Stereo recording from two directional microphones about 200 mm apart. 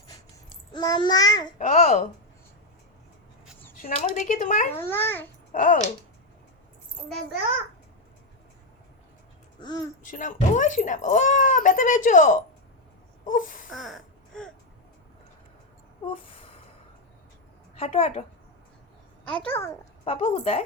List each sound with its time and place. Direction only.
0.7 s child singing: 20° left (ahead or behind)
1.5 s speech: 40° left (ahead or behind)
3.8 s speech: 40° left (ahead or behind)
4.7 s a child's voice: 10° left (ahead or behind)
5.5 s speech: 40° left (ahead or behind)
9.6 s child singing: 20° left (ahead or behind)
10.0 s speech: 40° left (ahead or behind)
13.7 s a sound: centre (ahead or behind)
17.7 s speech: 30° left (ahead or behind)
19.4 s a child's voice: 10° left (ahead or behind)
20.1 s speech: 30° left (ahead or behind)